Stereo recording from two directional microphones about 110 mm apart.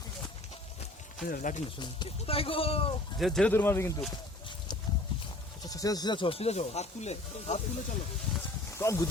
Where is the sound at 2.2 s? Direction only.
60° left (ahead or behind).